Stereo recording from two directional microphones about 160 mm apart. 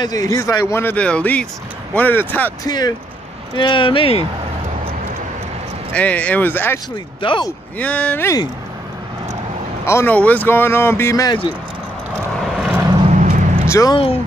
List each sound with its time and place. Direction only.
0.0 s a man's voice: 20° left (ahead or behind)
2.6 s speech: 25° left (ahead or behind)
5.9 s a man's voice: 10° left (ahead or behind)
7.2 s speech: 30° left (ahead or behind)
7.8 s a man's voice: 10° left (ahead or behind)
9.8 s a man's voice: 15° left (ahead or behind)
12.5 s vehicle: 5° right (ahead or behind)
13.1 s a sound: 50° right (ahead or behind)
13.7 s speech: 20° left (ahead or behind)
13.9 s speech: 35° left (ahead or behind)